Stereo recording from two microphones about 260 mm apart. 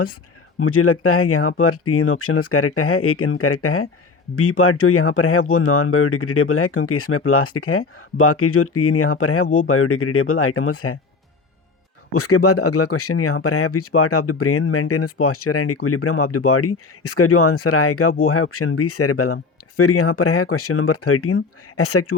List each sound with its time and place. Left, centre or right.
0.6 s speech: left
12.1 s speech: left